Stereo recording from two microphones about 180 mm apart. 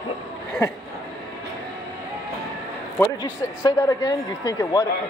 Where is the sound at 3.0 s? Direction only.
20° left (ahead or behind).